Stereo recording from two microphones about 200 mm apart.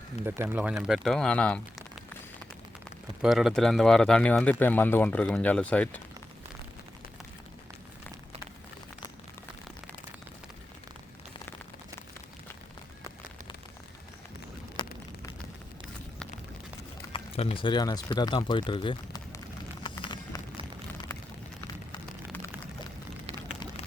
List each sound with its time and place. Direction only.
0.5 s speech: 10° right (ahead or behind)
3.2 s speech: centre (ahead or behind)
17.1 s speech: 25° left (ahead or behind)
19.8 s a sound: 25° left (ahead or behind)